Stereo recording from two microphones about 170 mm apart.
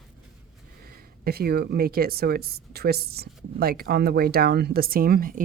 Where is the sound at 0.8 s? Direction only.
65° right (ahead or behind).